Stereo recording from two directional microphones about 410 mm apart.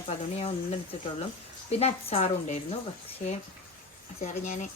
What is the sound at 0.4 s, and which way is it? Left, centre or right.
A woman's voice, centre.